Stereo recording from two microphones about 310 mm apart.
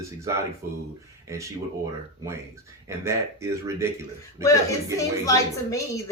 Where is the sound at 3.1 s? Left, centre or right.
Centre.